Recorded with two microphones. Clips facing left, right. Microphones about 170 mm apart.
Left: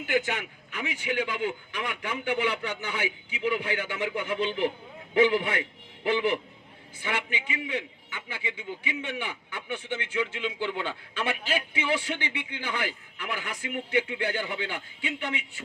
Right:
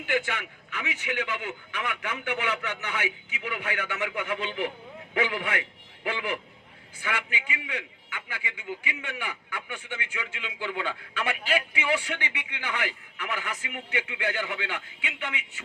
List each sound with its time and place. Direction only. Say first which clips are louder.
0.1 s a man's voice: left 1 dB; 40° left (ahead or behind)